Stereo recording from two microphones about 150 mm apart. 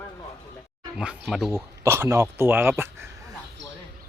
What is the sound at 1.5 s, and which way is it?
Speech, 20° right (ahead or behind).